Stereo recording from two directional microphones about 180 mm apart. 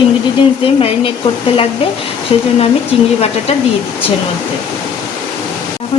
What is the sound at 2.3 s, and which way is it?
Speech, 35° left (ahead or behind).